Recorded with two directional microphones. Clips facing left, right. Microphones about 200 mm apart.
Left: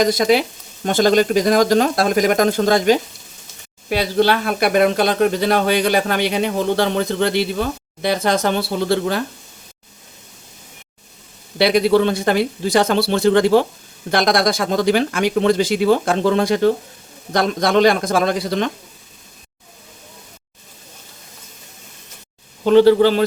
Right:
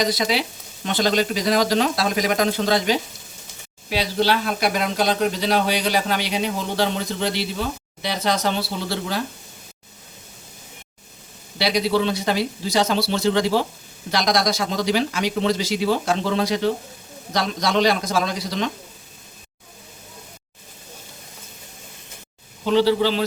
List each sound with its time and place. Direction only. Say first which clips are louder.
0.0 s speech: left 7 dB; 50° left (ahead or behind)
11.5 s speech: left 6 dB; 55° left (ahead or behind)
22.6 s speech: left 7 dB; 55° left (ahead or behind)